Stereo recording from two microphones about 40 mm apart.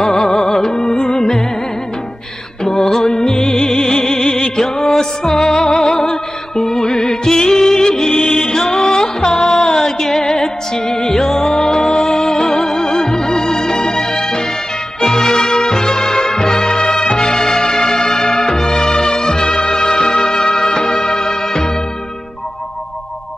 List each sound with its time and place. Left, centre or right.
0.0 s music: centre
2.6 s music: centre